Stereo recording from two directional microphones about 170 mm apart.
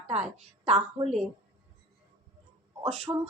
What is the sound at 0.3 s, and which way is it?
Speech, 40° right (ahead or behind).